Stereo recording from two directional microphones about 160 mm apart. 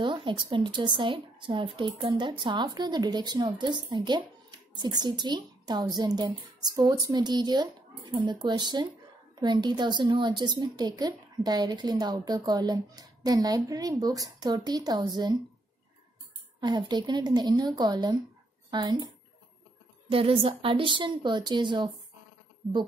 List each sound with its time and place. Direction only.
0.0 s a woman's voice: 30° right (ahead or behind)
16.5 s a woman's voice: 25° right (ahead or behind)
20.1 s a woman's voice: 35° right (ahead or behind)